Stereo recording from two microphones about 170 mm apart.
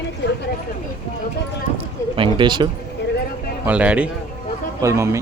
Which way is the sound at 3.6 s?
10° right (ahead or behind).